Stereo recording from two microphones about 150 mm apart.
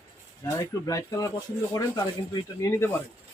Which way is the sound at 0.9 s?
20° left (ahead or behind).